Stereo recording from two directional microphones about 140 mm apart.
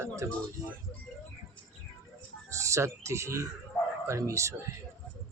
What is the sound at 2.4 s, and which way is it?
Speech, 20° right (ahead or behind).